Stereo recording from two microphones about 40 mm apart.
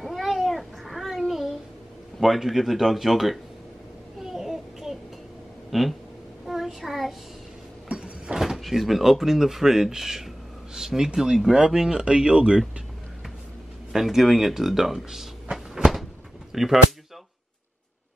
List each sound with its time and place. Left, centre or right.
0.0 s a sound: centre
2.1 s speech: centre
4.2 s a sound: centre
5.7 s speech: centre
6.4 s child singing: centre
7.9 s vehicle: right
8.4 s speech: centre; by 12.6 s right
13.9 s speech: centre
16.5 s speech: centre